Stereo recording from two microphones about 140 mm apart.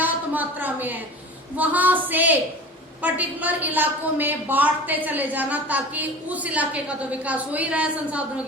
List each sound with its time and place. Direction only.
0.0 s a woman's voice: 10° right (ahead or behind)